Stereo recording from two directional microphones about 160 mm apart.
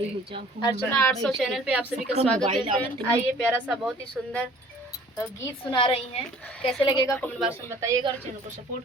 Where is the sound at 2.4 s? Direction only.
35° right (ahead or behind).